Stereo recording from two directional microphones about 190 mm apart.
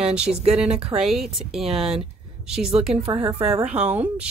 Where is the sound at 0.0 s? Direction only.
5° right (ahead or behind).